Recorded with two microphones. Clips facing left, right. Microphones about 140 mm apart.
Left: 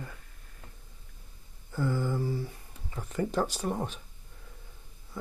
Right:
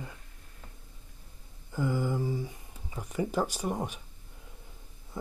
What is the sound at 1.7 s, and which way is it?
Speech, 15° right (ahead or behind).